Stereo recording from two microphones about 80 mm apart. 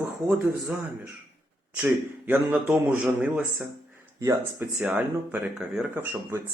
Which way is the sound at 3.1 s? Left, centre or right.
Right.